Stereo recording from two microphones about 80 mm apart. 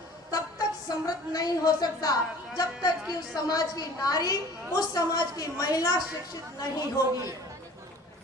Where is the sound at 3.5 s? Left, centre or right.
Left.